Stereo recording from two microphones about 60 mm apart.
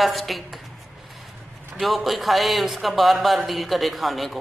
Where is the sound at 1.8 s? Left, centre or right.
Centre.